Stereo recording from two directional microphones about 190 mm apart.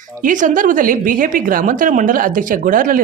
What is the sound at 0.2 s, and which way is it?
A woman's voice, 45° right (ahead or behind).